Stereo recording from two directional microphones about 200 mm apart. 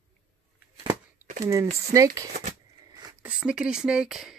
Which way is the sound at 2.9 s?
15° right (ahead or behind).